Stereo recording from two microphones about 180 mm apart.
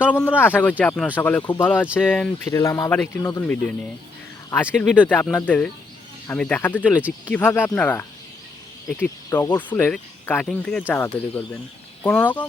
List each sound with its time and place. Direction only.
0.0 s speech: 10° left (ahead or behind)